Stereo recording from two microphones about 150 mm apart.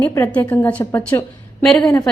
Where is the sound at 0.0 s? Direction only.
15° left (ahead or behind).